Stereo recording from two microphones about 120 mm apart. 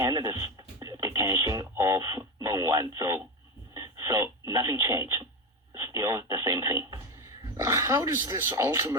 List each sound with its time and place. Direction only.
0.0 s radio: 30° right (ahead or behind)
5.7 s telephone: 30° right (ahead or behind)
7.5 s speech: 25° right (ahead or behind)